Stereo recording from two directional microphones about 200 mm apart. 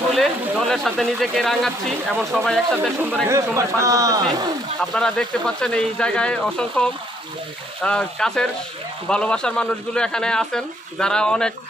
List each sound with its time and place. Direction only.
0.1 s speech: centre (ahead or behind)
3.3 s a man's voice: 15° right (ahead or behind)
4.9 s speech: 5° left (ahead or behind)